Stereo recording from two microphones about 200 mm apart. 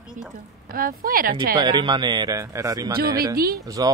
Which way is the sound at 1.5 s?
20° right (ahead or behind).